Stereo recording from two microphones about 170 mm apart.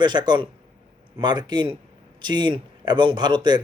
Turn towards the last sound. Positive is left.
turn(degrees=-25)  # may be behind; listen again after turning